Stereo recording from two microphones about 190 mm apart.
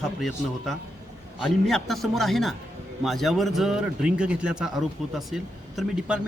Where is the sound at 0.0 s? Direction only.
Centre (ahead or behind).